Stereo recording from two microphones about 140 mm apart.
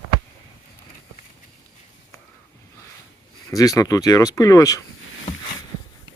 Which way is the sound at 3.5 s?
25° left (ahead or behind).